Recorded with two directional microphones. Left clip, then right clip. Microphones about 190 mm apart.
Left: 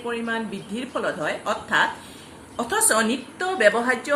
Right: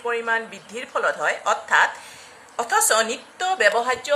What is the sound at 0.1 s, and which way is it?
A woman's voice, 35° right (ahead or behind).